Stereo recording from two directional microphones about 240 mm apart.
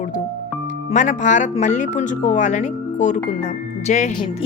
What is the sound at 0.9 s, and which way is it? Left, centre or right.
A woman's voice, left.